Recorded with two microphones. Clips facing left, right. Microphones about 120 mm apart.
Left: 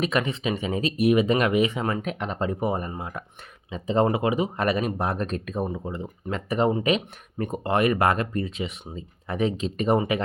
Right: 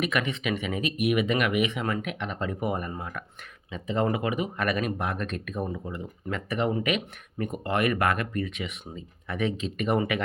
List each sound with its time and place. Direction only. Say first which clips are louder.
0.0 s speech: left 3 dB; 30° left (ahead or behind)